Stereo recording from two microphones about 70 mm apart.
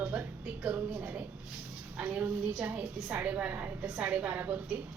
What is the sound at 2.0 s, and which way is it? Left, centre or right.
A woman's voice, right.